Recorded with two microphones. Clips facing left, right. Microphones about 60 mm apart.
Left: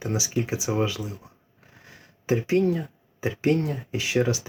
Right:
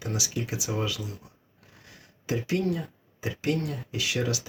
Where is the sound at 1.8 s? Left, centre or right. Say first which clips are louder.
Left 4 dB; left.